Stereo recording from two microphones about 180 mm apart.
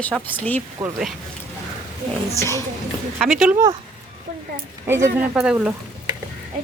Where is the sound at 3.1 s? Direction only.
Centre (ahead or behind).